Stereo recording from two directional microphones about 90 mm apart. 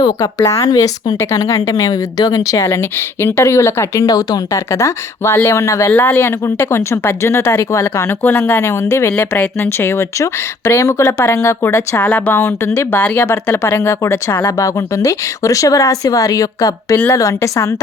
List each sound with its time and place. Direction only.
0.0 s speech: 40° left (ahead or behind)
5.9 s speech: 25° left (ahead or behind)
8.2 s speech: 20° left (ahead or behind)
12.0 s speech: 15° left (ahead or behind)
12.3 s speech: 25° left (ahead or behind)
13.3 s speech: 30° left (ahead or behind)